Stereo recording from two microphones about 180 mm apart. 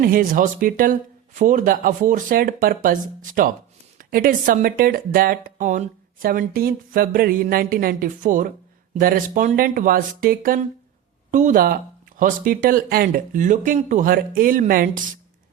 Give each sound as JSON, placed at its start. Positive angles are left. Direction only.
{"t": 0.0, "sound": "speech", "side_deg": -50}